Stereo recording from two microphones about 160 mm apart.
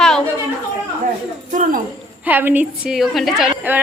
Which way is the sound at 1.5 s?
55° right (ahead or behind).